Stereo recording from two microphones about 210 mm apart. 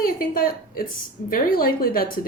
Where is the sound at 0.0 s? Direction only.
45° left (ahead or behind).